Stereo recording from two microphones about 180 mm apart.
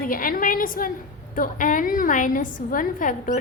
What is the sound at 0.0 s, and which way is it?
A woman's voice, 50° left (ahead or behind).